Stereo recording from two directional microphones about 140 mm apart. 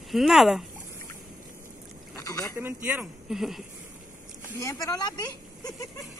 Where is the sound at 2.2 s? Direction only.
25° left (ahead or behind).